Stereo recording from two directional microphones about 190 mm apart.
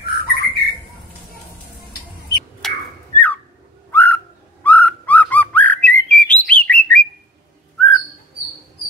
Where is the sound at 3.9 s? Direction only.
10° left (ahead or behind).